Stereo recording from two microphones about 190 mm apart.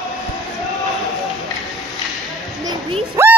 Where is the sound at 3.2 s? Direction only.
15° right (ahead or behind).